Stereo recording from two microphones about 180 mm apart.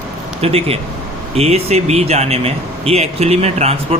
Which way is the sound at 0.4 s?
35° right (ahead or behind).